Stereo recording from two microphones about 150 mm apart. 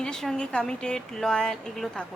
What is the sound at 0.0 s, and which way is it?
A woman's voice, 5° left (ahead or behind).